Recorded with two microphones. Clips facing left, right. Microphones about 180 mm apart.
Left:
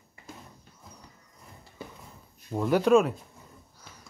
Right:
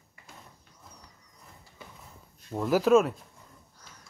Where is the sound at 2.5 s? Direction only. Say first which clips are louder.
Even; centre (ahead or behind).